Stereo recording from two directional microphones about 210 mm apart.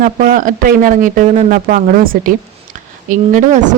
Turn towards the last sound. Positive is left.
turn(degrees=-40)  # may be behind; listen again after turning